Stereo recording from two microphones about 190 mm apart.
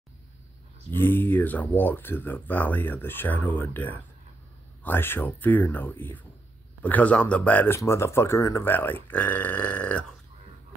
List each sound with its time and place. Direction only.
0.9 s speech: 10° left (ahead or behind)